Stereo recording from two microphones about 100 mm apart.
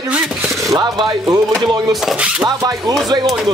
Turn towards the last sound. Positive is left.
turn(degrees=-40)  # may be behind; listen again after turning